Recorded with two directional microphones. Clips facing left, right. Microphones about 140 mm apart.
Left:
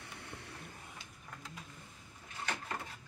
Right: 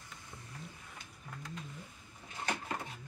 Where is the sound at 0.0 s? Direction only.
65° left (ahead or behind).